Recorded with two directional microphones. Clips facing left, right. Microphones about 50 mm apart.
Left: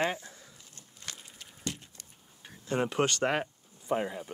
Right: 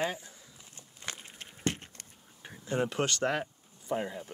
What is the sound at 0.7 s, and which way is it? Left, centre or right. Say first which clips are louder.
Walk: right 4 dB; right.